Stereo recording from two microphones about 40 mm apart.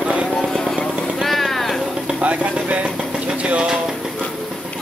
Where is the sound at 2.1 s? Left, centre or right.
Right.